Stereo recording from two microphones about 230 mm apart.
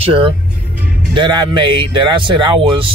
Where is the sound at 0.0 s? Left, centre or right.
Right.